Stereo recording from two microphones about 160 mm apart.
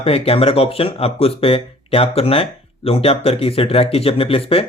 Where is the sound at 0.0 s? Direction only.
35° left (ahead or behind).